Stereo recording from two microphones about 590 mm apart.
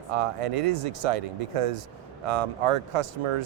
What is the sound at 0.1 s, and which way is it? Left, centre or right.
Speech, right.